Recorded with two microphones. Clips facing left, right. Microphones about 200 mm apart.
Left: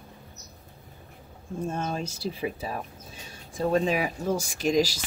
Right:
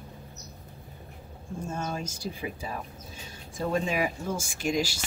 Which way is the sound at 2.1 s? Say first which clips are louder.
Left 4 dB; 35° left (ahead or behind).